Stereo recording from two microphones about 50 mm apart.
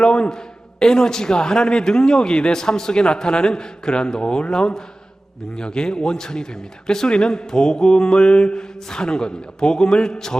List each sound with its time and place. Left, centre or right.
0.0 s a man's voice: centre